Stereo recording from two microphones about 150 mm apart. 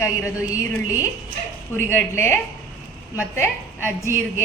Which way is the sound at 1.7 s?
15° left (ahead or behind).